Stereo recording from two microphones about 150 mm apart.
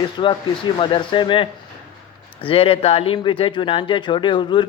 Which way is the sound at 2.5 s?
40° left (ahead or behind).